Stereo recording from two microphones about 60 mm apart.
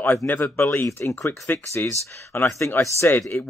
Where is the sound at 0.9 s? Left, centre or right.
Left.